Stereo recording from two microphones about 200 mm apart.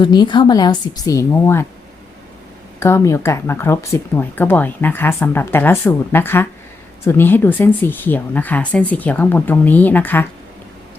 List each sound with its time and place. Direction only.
0.0 s a woman's voice: 20° left (ahead or behind)
2.8 s speech: 15° left (ahead or behind)